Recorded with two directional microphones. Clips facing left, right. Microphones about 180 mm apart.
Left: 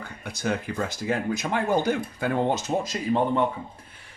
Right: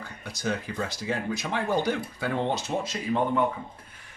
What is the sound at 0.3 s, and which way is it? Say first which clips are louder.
Speech: left 3 dB; 55° left (ahead or behind).